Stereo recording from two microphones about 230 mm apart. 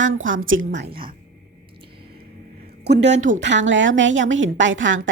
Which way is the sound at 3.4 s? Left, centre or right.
Right.